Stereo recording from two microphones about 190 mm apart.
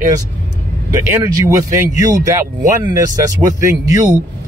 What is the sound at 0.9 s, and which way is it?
Speech, 15° right (ahead or behind).